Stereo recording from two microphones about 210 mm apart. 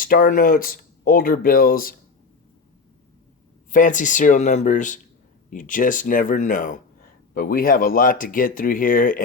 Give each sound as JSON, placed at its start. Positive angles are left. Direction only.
{"t": 0.0, "sound": "speech", "side_deg": 40}
{"t": 3.7, "sound": "speech", "side_deg": 40}